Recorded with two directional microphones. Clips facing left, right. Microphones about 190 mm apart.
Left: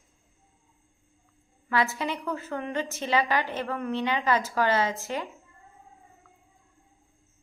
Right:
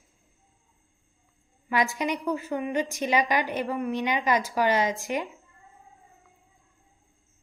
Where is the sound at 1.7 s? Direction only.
15° right (ahead or behind).